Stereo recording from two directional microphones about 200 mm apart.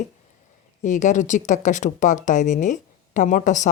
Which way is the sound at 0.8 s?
40° left (ahead or behind).